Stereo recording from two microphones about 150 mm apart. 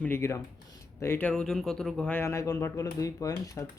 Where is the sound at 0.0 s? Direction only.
15° left (ahead or behind).